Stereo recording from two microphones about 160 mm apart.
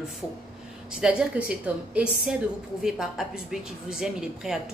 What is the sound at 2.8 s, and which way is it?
A woman's voice, centre (ahead or behind).